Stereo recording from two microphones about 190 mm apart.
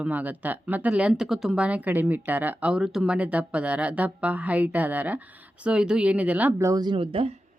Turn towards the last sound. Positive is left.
turn(degrees=-30)  # may be behind; listen again after turning